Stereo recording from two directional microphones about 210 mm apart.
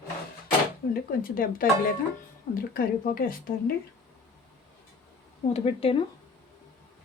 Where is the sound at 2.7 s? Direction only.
45° left (ahead or behind).